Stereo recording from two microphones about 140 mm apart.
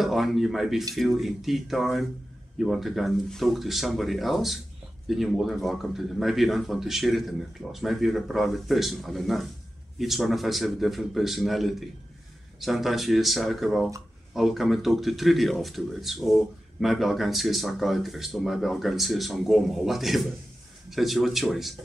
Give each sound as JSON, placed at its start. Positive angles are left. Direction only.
{"t": 0.0, "sound": "speech", "side_deg": 0}